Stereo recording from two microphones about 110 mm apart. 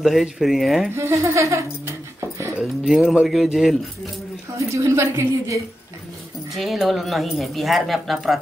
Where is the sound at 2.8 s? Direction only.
5° right (ahead or behind).